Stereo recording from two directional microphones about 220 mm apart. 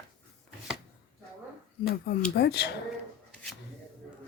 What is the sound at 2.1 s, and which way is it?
Speech, 50° left (ahead or behind).